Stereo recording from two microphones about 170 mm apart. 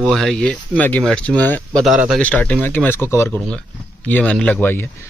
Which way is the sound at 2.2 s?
10° left (ahead or behind).